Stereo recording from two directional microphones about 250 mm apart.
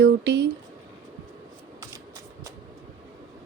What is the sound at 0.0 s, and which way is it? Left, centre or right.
Speech, right.